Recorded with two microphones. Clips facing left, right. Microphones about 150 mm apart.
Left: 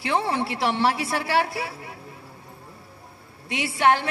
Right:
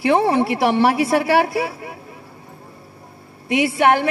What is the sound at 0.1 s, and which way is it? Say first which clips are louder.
A woman's voice: right 7 dB; 55° right (ahead or behind).